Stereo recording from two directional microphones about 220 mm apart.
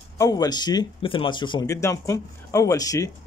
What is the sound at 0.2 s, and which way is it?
Speech, 15° left (ahead or behind).